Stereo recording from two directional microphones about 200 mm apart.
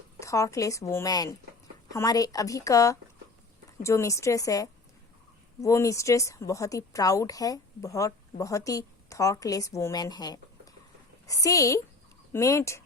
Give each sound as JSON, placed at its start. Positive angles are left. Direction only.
{"t": 0.2, "sound": "a woman's voice", "side_deg": 15}